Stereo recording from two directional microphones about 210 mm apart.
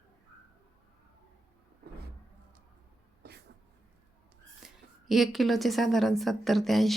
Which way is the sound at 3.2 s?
50° right (ahead or behind).